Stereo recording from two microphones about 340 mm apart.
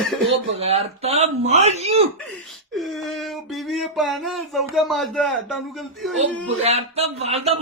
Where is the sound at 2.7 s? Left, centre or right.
Centre.